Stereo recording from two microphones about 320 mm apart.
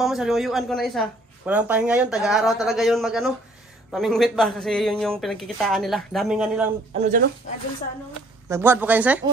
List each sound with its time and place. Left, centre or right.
0.0 s a woman's voice: centre
6.9 s speech: right
8.5 s a woman's voice: centre